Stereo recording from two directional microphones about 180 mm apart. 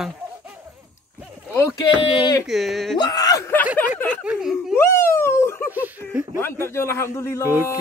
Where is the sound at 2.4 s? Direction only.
Centre (ahead or behind).